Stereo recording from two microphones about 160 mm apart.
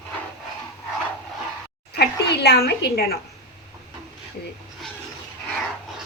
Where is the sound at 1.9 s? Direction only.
90° left.